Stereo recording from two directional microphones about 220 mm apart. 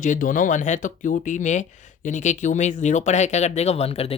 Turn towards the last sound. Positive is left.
turn(degrees=25)  # may be behind; listen again after turning